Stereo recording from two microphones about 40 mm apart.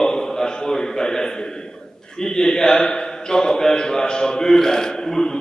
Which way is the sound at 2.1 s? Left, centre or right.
Centre.